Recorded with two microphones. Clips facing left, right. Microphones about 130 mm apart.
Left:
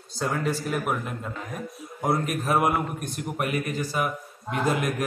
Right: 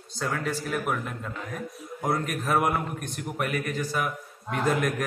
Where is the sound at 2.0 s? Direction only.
15° left (ahead or behind).